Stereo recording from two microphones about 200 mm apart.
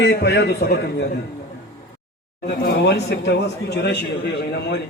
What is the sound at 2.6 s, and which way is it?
A man's voice, 55° left (ahead or behind).